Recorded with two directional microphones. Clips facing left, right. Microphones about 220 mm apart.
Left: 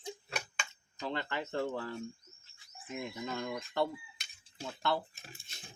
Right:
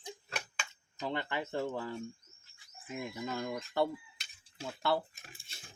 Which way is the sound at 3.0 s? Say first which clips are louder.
Right 1 dB; 10° right (ahead or behind).